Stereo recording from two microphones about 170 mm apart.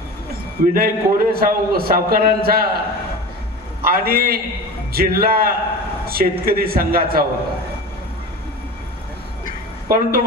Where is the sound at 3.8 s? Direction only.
60° right (ahead or behind).